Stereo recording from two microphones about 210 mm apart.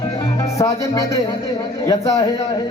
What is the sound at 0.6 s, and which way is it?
A man's voice, 15° left (ahead or behind).